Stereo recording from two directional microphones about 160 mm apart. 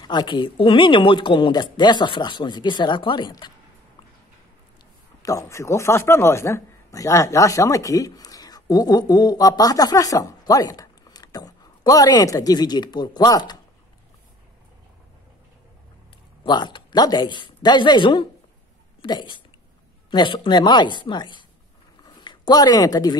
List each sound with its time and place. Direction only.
0.0 s speech: 25° left (ahead or behind)
5.2 s speech: 20° left (ahead or behind)
16.4 s speech: 30° left (ahead or behind)
22.0 s a sound: 30° left (ahead or behind)